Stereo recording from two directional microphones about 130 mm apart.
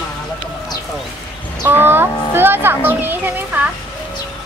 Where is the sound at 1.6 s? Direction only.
15° right (ahead or behind).